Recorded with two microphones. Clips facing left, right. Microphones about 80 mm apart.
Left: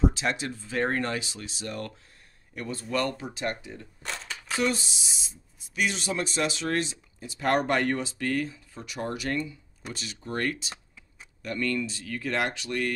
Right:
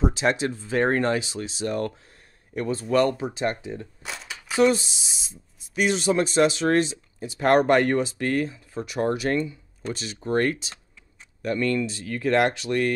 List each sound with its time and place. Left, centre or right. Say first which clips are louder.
0.0 s speech: right 4 dB; right
4.0 s a sound: even; centre
4.6 s speech: right 8 dB; centre
7.3 s speech: right 7 dB; right